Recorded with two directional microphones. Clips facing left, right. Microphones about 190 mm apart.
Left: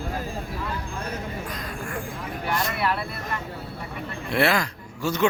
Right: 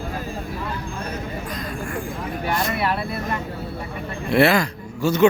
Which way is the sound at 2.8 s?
25° right (ahead or behind).